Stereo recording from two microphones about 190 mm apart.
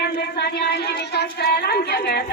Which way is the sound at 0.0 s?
55° left (ahead or behind).